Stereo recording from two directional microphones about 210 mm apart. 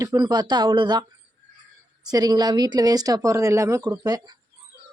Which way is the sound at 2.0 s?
20° right (ahead or behind).